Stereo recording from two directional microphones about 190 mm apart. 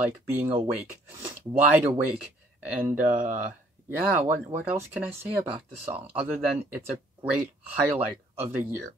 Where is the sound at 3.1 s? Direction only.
45° right (ahead or behind).